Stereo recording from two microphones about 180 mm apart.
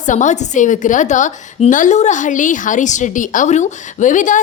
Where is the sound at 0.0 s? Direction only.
45° left (ahead or behind).